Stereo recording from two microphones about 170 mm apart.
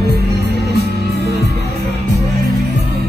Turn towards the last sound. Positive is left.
turn(degrees=-75)  # may be behind; listen again after turning